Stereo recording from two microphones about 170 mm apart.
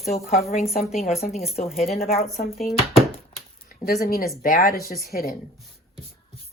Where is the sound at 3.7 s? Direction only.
55° left (ahead or behind).